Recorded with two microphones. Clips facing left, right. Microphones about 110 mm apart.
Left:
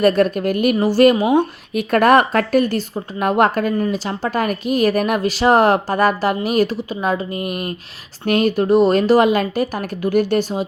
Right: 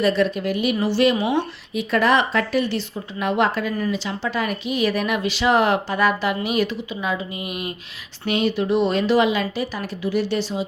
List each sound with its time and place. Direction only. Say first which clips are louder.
0.0 s speech: left 5 dB; 50° left (ahead or behind)